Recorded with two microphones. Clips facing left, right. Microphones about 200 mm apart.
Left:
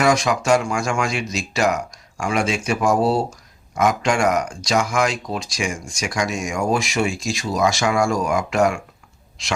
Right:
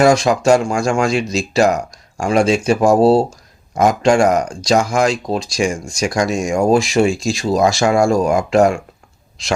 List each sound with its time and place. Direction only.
0.0 s speech: 30° right (ahead or behind)